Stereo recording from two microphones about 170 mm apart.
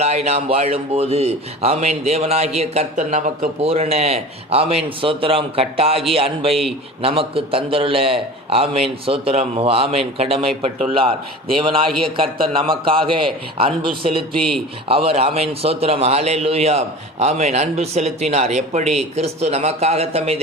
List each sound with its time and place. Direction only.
0.3 s a man's voice: 40° right (ahead or behind)